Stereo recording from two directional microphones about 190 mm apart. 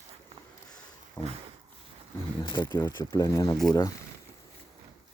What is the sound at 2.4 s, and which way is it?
Speech, 25° left (ahead or behind).